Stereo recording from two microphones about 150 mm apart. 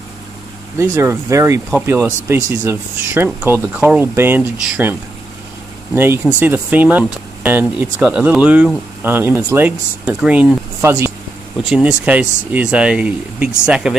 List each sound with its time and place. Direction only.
0.7 s speech: 20° right (ahead or behind)
5.9 s speech: 15° right (ahead or behind)
11.6 s speech: 5° right (ahead or behind)